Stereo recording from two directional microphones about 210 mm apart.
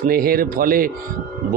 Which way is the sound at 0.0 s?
45° right (ahead or behind).